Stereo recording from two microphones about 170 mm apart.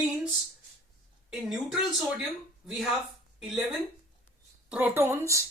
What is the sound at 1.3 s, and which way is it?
Speech, 5° right (ahead or behind).